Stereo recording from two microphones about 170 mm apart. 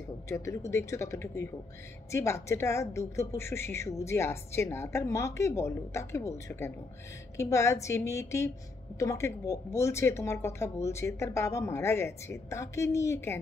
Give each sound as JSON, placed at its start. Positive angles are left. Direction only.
{"t": 0.3, "sound": "a woman's voice", "side_deg": 15}